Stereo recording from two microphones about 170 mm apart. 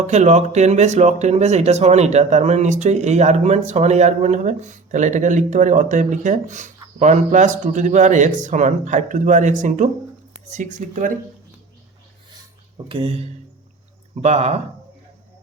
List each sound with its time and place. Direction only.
0.1 s speech: 40° right (ahead or behind)
12.3 s a sound: 30° right (ahead or behind)
14.2 s speech: 40° right (ahead or behind)